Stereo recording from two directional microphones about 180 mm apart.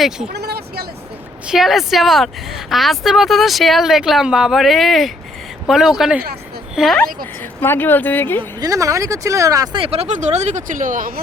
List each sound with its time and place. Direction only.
0.3 s vehicle: 60° right (ahead or behind)
1.5 s speech: centre (ahead or behind)
7.6 s speech: 10° left (ahead or behind)
8.4 s speech: 20° right (ahead or behind); by 11.1 s 50° right (ahead or behind)